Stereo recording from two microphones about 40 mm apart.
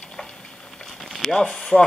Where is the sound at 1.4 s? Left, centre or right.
Centre.